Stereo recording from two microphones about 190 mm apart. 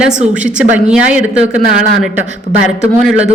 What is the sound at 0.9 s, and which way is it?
Speech, 5° right (ahead or behind).